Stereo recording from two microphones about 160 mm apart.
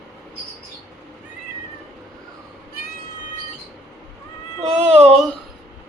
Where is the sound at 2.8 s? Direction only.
65° left (ahead or behind).